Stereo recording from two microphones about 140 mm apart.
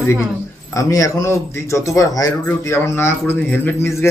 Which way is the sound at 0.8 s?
25° left (ahead or behind).